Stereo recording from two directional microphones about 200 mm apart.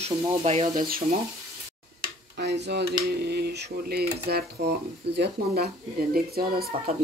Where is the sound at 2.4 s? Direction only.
60° right (ahead or behind).